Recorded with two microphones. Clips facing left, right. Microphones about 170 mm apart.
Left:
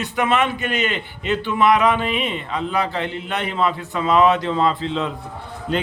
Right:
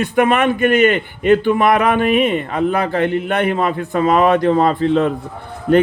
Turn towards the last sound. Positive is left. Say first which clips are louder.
# right 10 dB
turn(degrees=-60)  # may be behind; listen again after turning